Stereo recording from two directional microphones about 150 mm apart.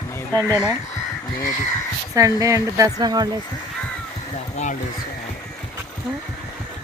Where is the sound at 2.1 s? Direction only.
20° right (ahead or behind).